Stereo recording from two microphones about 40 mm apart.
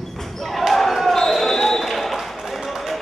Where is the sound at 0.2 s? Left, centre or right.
Centre.